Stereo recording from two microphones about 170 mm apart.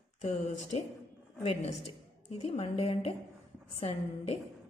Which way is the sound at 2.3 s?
35° left (ahead or behind).